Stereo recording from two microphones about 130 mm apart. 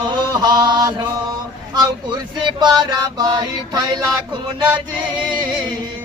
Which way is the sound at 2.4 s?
35° right (ahead or behind).